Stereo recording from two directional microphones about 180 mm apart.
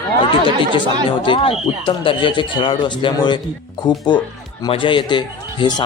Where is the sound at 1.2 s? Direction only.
30° left (ahead or behind).